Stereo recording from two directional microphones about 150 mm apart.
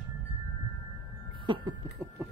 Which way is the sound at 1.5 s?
35° right (ahead or behind).